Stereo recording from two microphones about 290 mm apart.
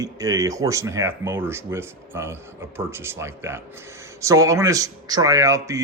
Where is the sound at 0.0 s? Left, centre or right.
Centre.